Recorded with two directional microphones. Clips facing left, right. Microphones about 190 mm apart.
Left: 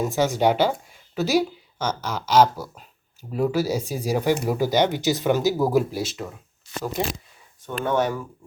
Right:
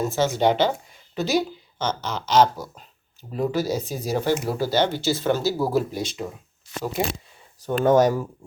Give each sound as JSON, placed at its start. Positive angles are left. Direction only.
{"t": 0.0, "sound": "speech", "side_deg": 15}
{"t": 7.6, "sound": "speech", "side_deg": -40}